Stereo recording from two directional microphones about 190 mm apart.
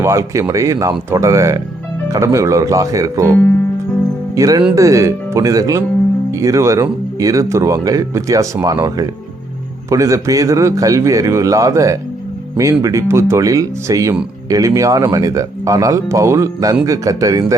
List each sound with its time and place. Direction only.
0.0 s speech: 15° right (ahead or behind)
4.4 s speech: 20° right (ahead or behind)